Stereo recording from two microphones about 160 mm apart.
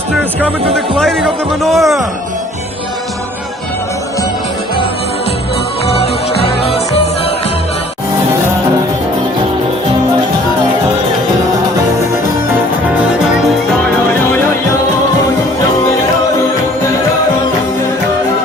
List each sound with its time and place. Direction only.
0.3 s speech: 5° left (ahead or behind)